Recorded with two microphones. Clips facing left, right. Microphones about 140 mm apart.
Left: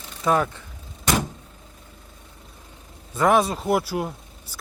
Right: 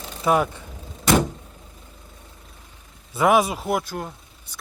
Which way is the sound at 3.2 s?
10° right (ahead or behind).